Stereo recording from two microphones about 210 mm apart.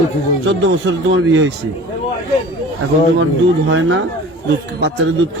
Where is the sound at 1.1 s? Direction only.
65° right (ahead or behind).